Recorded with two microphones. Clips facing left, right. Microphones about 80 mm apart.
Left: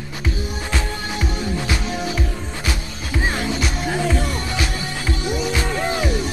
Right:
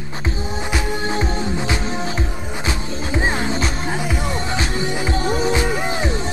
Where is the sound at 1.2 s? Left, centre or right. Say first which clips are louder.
Right 2 dB; right.